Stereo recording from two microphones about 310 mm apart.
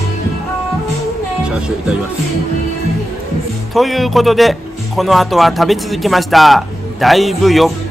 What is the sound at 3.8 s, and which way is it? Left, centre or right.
Speech, centre.